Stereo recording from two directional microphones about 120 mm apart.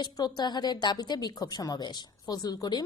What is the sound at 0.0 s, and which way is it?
A woman's voice, 35° left (ahead or behind).